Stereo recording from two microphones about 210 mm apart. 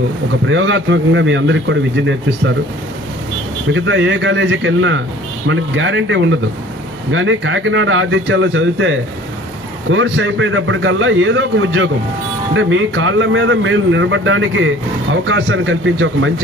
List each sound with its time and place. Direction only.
0.5 s a man's voice: 65° right (ahead or behind)
3.7 s a man's voice: 60° right (ahead or behind)